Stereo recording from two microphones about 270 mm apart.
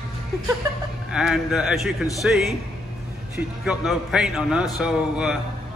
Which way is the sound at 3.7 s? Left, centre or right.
Centre.